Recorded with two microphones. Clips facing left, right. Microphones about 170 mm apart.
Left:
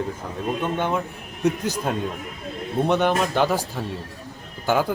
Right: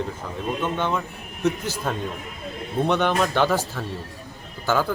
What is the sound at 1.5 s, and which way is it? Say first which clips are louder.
Speech: left 2 dB; 15° left (ahead or behind).